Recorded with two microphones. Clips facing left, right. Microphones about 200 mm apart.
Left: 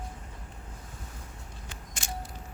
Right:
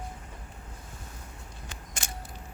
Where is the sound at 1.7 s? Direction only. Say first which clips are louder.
Right 3 dB; 55° right (ahead or behind).